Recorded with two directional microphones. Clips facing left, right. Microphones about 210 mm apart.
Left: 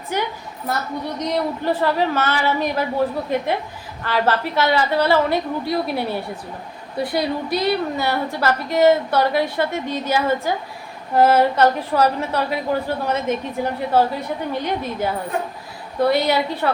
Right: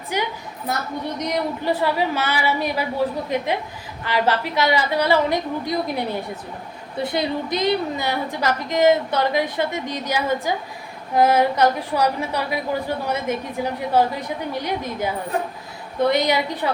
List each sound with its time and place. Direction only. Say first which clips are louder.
0.1 s a woman's voice: left 1 dB; 10° right (ahead or behind)